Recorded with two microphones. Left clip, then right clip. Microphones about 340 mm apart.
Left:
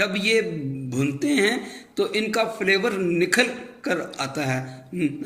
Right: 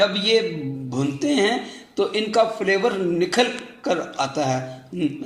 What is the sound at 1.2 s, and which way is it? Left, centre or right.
Speech, centre.